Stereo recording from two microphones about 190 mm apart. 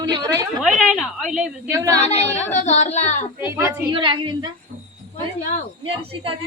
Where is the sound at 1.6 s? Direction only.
15° right (ahead or behind).